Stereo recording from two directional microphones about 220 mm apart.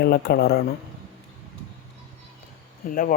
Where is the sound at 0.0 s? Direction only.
45° left (ahead or behind).